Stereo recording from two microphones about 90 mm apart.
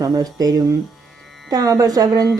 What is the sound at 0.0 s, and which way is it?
Speech, 45° right (ahead or behind).